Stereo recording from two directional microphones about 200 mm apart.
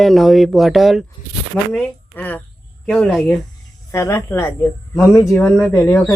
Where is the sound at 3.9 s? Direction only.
15° left (ahead or behind).